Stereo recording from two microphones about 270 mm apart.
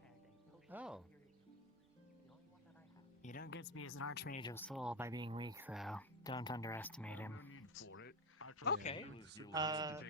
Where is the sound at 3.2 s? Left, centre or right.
Left.